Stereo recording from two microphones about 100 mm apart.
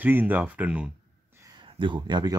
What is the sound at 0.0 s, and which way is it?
Speech, 20° right (ahead or behind).